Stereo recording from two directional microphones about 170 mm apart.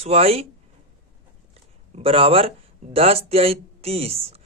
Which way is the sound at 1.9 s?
35° right (ahead or behind).